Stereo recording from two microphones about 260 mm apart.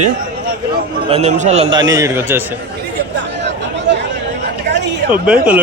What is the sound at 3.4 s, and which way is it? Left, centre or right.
Chatter, right.